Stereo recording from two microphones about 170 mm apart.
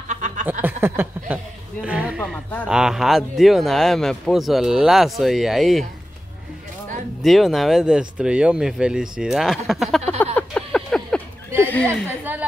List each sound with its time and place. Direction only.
0.1 s a sound: 45° right (ahead or behind)
0.5 s speech: 10° right (ahead or behind)
2.1 s speech: 5° left (ahead or behind)
7.2 s speech: centre (ahead or behind)